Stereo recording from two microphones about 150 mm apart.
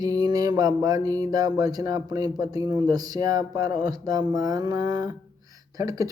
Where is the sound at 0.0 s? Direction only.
25° right (ahead or behind).